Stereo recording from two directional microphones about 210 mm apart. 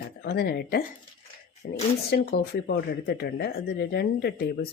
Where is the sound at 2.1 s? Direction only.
50° left (ahead or behind).